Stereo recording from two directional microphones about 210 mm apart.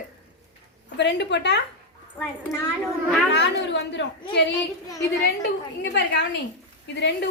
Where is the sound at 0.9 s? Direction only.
55° left (ahead or behind).